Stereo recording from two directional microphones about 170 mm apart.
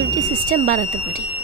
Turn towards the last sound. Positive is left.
turn(degrees=-55)  # may be behind; listen again after turning